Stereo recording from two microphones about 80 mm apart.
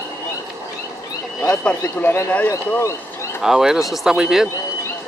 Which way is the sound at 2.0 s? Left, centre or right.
Left.